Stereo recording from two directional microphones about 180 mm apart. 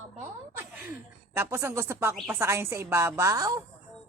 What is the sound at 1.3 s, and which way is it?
Speech, 15° right (ahead or behind).